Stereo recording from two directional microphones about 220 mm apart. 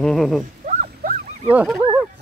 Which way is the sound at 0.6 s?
35° right (ahead or behind).